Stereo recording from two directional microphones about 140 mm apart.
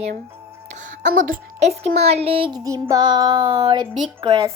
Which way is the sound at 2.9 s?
30° right (ahead or behind).